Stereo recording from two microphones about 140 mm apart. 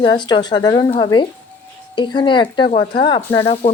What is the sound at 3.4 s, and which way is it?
Sizzle, 50° left (ahead or behind).